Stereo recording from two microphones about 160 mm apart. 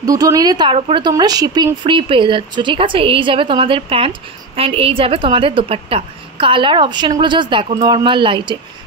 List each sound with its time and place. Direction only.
0.0 s speech: 20° right (ahead or behind)